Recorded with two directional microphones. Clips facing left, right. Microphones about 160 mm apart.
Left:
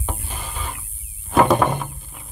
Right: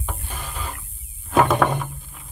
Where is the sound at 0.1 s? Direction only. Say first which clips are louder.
Left 2 dB; 15° left (ahead or behind).